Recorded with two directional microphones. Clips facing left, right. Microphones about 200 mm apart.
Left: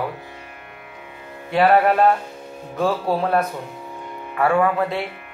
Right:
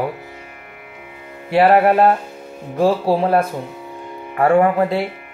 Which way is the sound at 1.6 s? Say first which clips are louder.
Right 3 dB; 30° right (ahead or behind).